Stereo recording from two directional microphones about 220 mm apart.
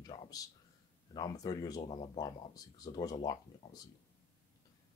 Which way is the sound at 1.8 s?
30° left (ahead or behind).